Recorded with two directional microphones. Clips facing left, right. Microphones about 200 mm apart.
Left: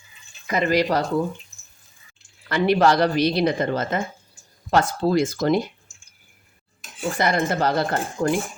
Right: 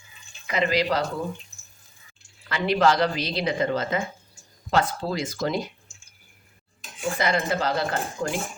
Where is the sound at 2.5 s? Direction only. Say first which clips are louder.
Left 3 dB; 55° left (ahead or behind).